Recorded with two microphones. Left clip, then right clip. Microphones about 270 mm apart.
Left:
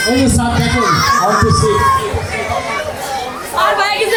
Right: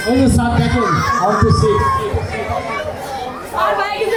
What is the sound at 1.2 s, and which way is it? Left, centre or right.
Speech, centre.